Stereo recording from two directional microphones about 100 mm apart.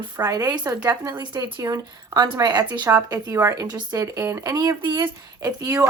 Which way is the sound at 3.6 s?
40° right (ahead or behind).